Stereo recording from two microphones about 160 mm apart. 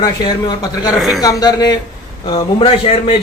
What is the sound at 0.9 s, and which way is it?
Speech, centre (ahead or behind).